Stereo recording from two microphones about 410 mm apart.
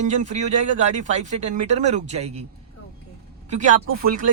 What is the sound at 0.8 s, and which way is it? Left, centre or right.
Speech, centre.